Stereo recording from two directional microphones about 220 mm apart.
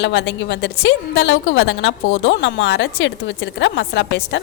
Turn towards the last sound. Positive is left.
turn(degrees=55)  # may be behind; listen again after turning